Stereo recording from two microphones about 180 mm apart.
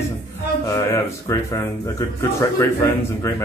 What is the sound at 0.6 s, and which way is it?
Speech, 20° left (ahead or behind).